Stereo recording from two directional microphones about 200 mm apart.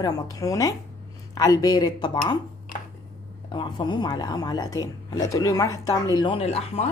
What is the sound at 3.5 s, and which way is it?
A woman's voice, 25° left (ahead or behind).